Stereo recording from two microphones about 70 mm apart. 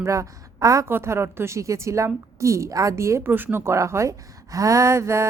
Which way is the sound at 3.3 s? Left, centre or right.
Right.